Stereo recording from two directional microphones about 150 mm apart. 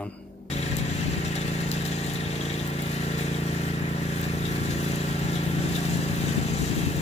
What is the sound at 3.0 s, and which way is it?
Vehicle, 45° left (ahead or behind).